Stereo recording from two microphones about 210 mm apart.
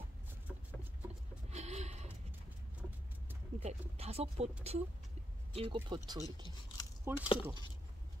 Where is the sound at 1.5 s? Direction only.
30° right (ahead or behind).